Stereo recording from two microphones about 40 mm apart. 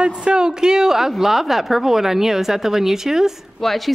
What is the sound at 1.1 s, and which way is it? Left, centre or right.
A woman's voice, centre.